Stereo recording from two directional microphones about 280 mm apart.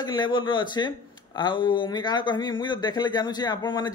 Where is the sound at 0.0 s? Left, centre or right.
Centre.